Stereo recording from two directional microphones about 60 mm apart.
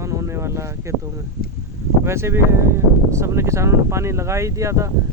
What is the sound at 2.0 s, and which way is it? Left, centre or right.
Speech, right.